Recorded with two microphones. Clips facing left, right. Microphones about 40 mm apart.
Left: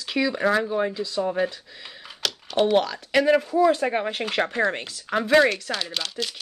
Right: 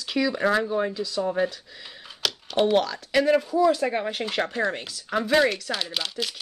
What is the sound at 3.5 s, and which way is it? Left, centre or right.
Speech, left.